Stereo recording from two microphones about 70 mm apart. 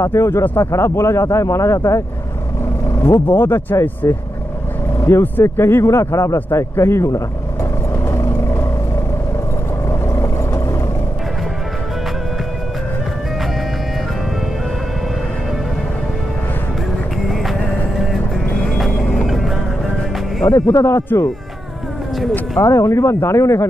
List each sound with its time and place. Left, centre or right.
0.0 s speech: left
3.0 s speech: left
4.0 s speech: left
5.1 s speech: left
8.1 s vehicle: left
9.8 s vehicle: left
17.3 s vehicle: centre
19.2 s music: centre
20.4 s speech: left
22.6 s speech: left